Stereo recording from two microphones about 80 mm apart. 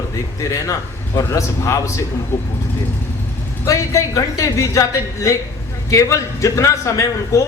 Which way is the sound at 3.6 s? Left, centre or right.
Left.